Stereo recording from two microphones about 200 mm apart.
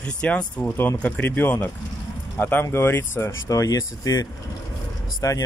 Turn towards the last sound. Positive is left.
turn(degrees=20)  # may be behind; listen again after turning